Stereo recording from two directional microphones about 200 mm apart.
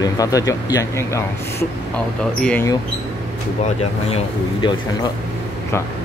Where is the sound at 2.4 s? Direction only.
5° left (ahead or behind).